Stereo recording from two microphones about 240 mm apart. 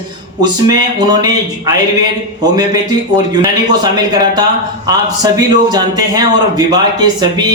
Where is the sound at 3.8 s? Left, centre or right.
Centre.